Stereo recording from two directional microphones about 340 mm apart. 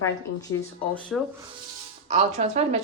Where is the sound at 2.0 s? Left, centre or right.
Centre.